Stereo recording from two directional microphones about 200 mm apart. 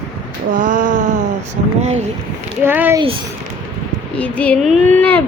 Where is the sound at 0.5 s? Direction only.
40° right (ahead or behind).